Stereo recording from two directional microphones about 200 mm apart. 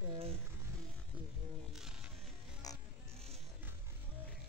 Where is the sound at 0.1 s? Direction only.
30° right (ahead or behind).